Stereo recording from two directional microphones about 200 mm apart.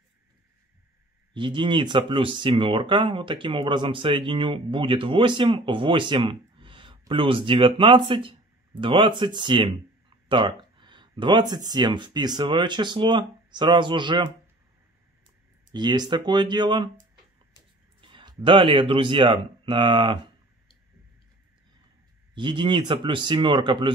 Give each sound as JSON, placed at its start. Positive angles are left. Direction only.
{"t": 1.3, "sound": "speech", "side_deg": -25}
{"t": 15.7, "sound": "speech", "side_deg": -20}
{"t": 18.0, "sound": "speech", "side_deg": -25}
{"t": 22.3, "sound": "speech", "side_deg": -25}